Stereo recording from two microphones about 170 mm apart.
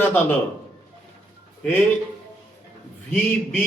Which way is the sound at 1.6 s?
10° left (ahead or behind).